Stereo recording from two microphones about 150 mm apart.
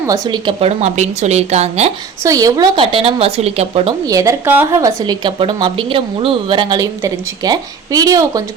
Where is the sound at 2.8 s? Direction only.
35° right (ahead or behind).